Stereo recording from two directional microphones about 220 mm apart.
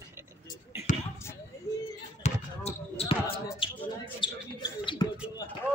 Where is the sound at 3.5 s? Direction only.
20° left (ahead or behind).